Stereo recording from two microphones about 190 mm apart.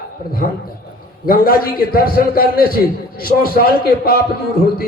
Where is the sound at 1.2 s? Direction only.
50° left (ahead or behind).